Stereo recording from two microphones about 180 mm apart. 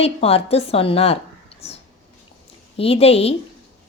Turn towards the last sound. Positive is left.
turn(degrees=35)  # may be behind; listen again after turning